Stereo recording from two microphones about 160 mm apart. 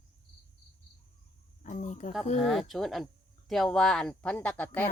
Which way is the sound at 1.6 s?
50° left (ahead or behind).